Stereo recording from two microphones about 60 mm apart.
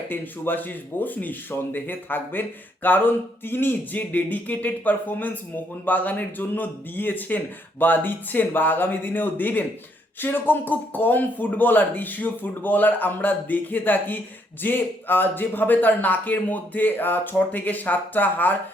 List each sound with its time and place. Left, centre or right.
0.1 s speech: left